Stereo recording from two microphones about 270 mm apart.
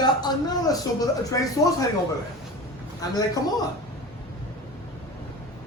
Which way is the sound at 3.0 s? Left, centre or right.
Centre.